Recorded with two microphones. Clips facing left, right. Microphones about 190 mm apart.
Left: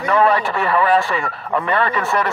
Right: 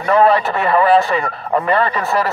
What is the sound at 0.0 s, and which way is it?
A man's voice, 35° right (ahead or behind).